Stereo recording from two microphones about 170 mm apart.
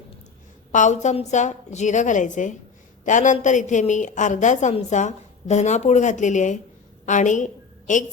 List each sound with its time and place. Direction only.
0.7 s a woman's voice: 45° left (ahead or behind)